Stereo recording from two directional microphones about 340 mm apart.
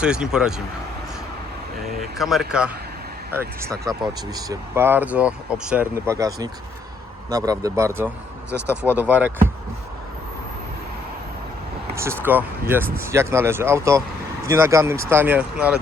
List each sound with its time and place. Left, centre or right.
0.0 s speech: centre
2.0 s speech: centre
8.0 s speech: centre
9.0 s speech: centre
11.9 s speech: centre